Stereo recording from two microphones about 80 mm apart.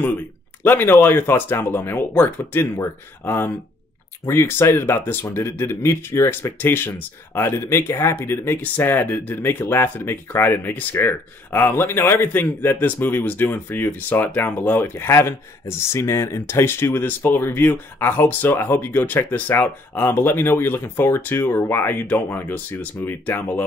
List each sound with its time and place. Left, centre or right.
0.7 s speech: left
6.6 s speech: left